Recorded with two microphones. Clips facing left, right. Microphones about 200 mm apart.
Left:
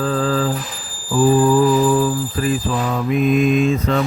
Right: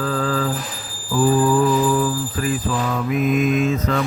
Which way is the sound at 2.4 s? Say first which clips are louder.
Left 2 dB; 25° left (ahead or behind).